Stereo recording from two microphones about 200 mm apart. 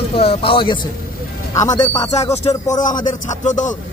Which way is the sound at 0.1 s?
30° left (ahead or behind).